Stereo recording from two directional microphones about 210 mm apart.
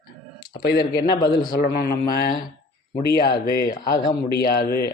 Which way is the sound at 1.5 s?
45° left (ahead or behind).